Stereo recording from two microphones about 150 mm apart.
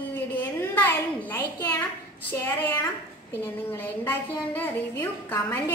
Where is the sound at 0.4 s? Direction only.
15° left (ahead or behind).